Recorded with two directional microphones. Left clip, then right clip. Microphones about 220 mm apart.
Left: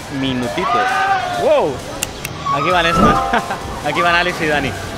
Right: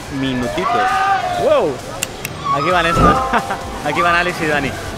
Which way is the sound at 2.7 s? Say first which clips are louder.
Even; 5° left (ahead or behind).